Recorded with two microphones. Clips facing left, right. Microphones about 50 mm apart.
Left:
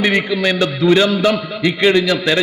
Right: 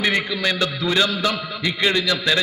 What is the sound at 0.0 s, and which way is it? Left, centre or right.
A man's voice, left.